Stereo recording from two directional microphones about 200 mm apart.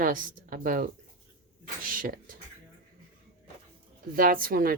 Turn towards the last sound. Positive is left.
turn(degrees=-45)  # may be behind; listen again after turning